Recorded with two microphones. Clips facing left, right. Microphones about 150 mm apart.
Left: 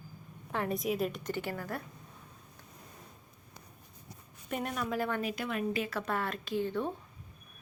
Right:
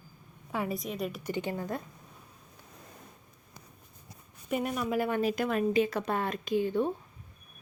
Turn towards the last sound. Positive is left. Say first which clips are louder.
# right 5 dB
turn(degrees=-15)  # may be behind; listen again after turning